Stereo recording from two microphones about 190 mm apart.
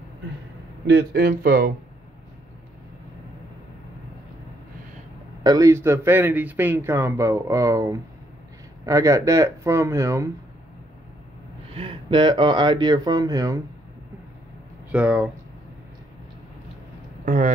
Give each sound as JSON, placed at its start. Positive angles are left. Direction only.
{"t": 0.8, "sound": "speech", "side_deg": -60}
{"t": 5.4, "sound": "speech", "side_deg": -20}
{"t": 11.7, "sound": "speech", "side_deg": -30}
{"t": 14.9, "sound": "speech", "side_deg": -5}
{"t": 17.2, "sound": "a sound", "side_deg": -45}